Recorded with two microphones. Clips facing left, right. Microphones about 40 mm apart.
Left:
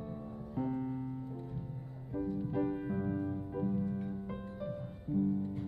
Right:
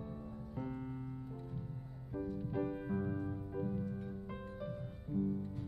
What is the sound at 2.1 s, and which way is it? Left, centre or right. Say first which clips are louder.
Music: left 4 dB; centre.